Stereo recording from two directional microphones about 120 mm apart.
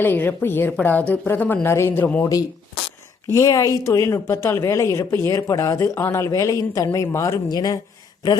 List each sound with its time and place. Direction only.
0.0 s a woman's voice: 15° left (ahead or behind)
3.3 s a woman's voice: 25° left (ahead or behind)